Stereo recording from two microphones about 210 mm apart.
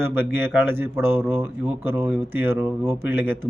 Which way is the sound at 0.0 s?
10° right (ahead or behind).